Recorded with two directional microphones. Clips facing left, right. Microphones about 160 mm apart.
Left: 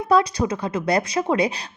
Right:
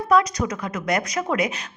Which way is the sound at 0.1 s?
30° left (ahead or behind).